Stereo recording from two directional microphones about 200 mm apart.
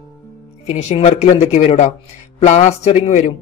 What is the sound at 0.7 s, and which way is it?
Speech, 35° left (ahead or behind).